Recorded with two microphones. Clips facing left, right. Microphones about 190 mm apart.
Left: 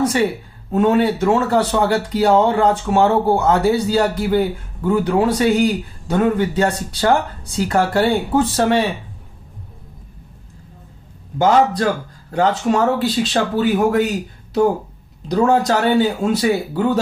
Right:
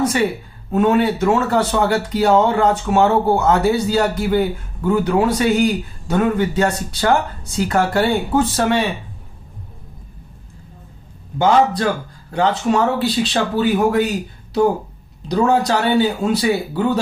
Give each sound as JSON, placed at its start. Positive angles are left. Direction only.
{"t": 0.7, "sound": "speech", "side_deg": 30}
{"t": 11.3, "sound": "speech", "side_deg": 45}
{"t": 15.3, "sound": "speech", "side_deg": 45}